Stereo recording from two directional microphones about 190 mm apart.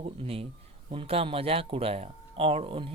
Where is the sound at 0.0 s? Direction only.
30° right (ahead or behind).